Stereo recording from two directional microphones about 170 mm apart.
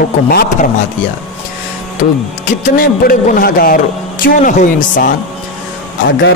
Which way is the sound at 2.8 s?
55° left (ahead or behind).